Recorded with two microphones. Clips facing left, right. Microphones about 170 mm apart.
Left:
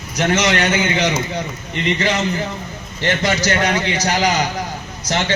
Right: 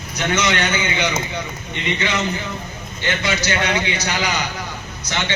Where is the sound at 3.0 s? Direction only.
40° left (ahead or behind).